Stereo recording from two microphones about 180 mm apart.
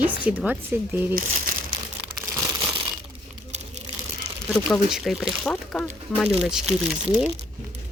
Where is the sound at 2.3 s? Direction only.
20° right (ahead or behind).